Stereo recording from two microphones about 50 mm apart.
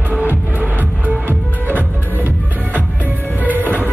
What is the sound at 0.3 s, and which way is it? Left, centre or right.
Music, right.